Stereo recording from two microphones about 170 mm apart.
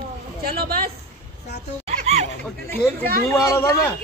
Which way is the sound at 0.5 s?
65° right (ahead or behind).